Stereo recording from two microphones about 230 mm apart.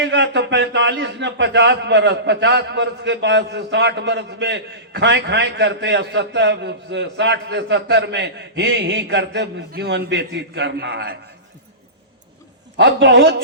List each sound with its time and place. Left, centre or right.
0.0 s a man's voice: right
12.7 s a man's voice: right